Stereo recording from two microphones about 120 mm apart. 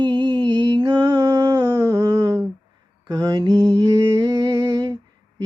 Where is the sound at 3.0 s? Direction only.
30° right (ahead or behind).